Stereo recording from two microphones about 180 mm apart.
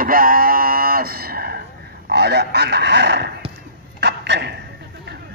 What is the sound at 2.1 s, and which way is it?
Speech, 65° right (ahead or behind).